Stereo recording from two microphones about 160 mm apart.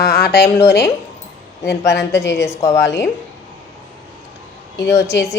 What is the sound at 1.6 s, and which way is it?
Speech, 90° left.